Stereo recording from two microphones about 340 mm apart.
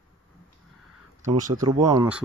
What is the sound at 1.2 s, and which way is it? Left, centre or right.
Speech, right.